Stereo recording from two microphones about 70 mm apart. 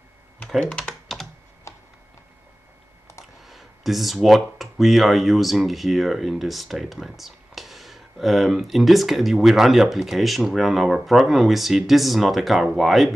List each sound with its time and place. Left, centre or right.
0.6 s speech: centre
1.7 s tick-tock: left
3.4 s speech: centre